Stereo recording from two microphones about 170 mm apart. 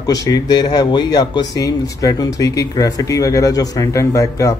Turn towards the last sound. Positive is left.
turn(degrees=20)  # may be behind; listen again after turning